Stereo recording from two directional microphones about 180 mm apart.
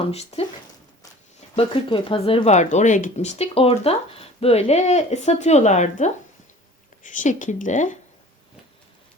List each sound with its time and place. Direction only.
0.0 s speech: 35° left (ahead or behind)
1.5 s speech: 30° left (ahead or behind)